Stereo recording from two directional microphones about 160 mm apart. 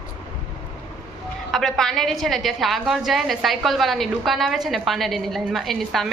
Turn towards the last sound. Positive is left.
turn(degrees=0)  # may be behind; listen again after turning